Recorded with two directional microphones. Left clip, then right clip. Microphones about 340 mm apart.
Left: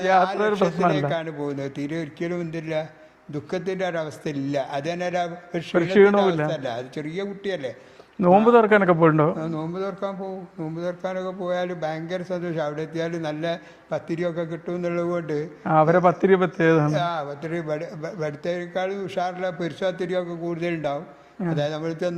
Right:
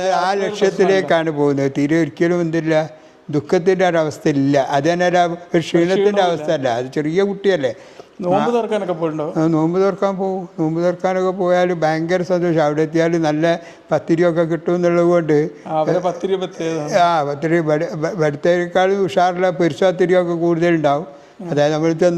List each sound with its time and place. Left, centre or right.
0.0 s speech: right
8.4 s a man's voice: left
9.3 s speech: right
15.6 s a man's voice: left
16.8 s speech: right